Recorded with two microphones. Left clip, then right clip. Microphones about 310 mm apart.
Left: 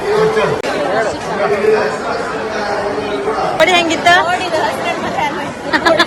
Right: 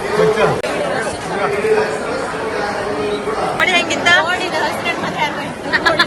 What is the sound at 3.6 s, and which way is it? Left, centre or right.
A woman's voice, centre.